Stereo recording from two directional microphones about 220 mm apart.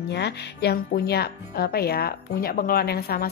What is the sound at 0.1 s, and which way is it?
A woman's voice, 50° left (ahead or behind).